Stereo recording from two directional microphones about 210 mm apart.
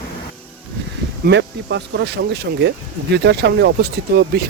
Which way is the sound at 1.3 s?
55° right (ahead or behind).